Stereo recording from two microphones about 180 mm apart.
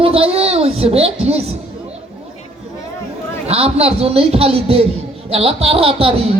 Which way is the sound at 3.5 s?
35° right (ahead or behind).